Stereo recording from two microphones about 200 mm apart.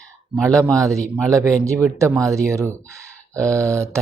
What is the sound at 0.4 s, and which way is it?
Speech, 15° right (ahead or behind).